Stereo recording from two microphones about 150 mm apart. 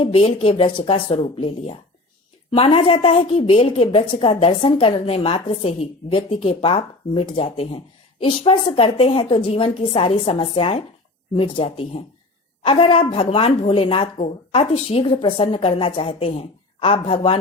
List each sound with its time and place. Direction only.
0.0 s a woman's voice: 35° left (ahead or behind)